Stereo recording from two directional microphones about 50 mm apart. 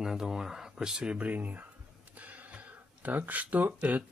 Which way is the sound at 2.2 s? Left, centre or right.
Right.